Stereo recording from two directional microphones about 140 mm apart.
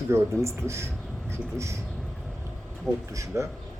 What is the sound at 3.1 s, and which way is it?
Speech, 20° right (ahead or behind).